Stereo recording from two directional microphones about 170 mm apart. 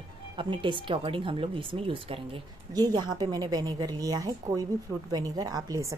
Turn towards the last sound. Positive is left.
turn(degrees=-20)  # may be behind; listen again after turning